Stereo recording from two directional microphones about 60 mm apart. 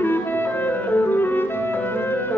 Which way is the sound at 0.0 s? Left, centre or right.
Left.